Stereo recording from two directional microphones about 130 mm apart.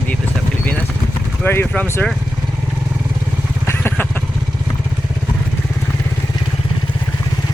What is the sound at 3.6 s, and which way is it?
Vehicle, 15° left (ahead or behind).